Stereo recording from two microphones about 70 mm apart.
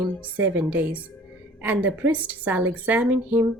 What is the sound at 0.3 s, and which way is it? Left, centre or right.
A woman's voice, right.